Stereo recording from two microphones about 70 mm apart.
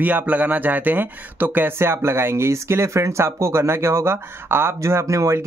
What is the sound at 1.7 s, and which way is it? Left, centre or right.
Speech, right.